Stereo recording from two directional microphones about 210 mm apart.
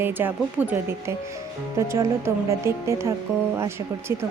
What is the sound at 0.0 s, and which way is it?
Speech, 10° right (ahead or behind).